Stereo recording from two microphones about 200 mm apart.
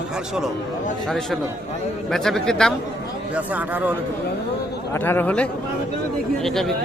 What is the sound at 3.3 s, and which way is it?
Speech, 10° right (ahead or behind).